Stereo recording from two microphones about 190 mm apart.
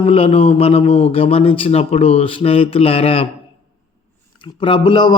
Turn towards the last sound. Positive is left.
turn(degrees=25)  # may be behind; listen again after turning